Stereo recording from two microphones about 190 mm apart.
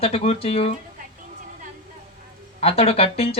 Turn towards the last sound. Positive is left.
turn(degrees=30)  # may be behind; listen again after turning